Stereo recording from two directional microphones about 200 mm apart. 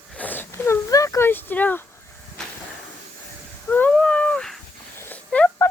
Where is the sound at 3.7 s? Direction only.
5° left (ahead or behind).